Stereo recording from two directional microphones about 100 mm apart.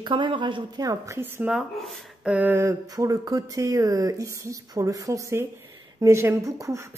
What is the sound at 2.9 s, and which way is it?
A woman's voice, 35° right (ahead or behind).